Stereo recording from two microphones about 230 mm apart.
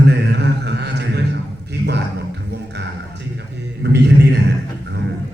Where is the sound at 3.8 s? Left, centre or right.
Right.